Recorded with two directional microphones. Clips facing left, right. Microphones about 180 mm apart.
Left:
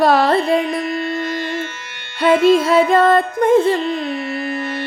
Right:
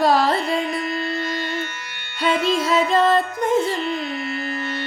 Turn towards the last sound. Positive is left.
turn(degrees=60)  # may be behind; listen again after turning